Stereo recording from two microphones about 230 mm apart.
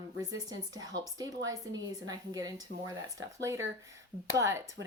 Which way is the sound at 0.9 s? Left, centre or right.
Centre.